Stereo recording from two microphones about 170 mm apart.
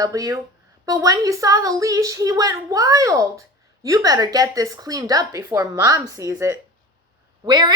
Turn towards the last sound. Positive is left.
turn(degrees=-25)  # may be behind; listen again after turning